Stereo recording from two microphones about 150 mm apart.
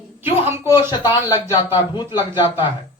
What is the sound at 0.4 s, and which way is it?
Speech, 15° right (ahead or behind).